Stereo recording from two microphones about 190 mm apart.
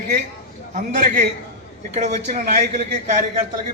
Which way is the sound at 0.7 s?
40° right (ahead or behind).